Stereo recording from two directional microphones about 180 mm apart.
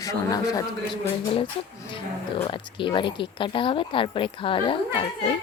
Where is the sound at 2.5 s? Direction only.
25° left (ahead or behind).